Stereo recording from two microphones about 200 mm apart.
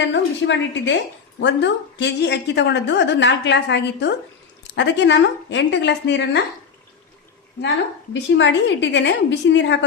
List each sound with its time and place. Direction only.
0.1 s a woman's voice: 65° left (ahead or behind)
8.1 s a woman's voice: 65° left (ahead or behind)